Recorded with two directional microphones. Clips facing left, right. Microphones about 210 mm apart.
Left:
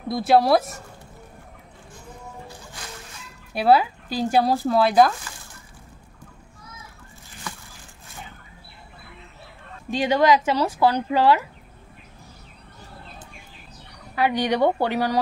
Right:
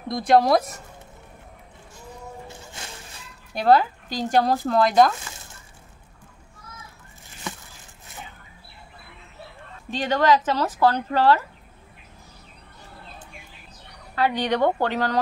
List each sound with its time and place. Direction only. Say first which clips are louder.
0.1 s speech: even; 5° left (ahead or behind)
3.5 s speech: even; 10° left (ahead or behind)
7.5 s a sound: right 3 dB; 25° right (ahead or behind)
9.8 s speech: left 2 dB; 10° left (ahead or behind)
14.1 s speech: left 1 dB; 10° left (ahead or behind)